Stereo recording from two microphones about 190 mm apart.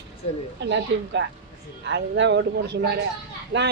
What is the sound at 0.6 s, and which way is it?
A man's voice, 70° right (ahead or behind).